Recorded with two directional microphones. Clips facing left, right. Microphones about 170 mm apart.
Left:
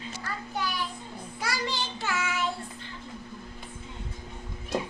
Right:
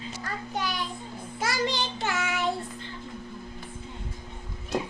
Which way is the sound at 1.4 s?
20° right (ahead or behind).